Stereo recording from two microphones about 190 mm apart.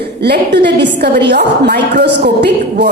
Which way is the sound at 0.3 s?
60° right (ahead or behind).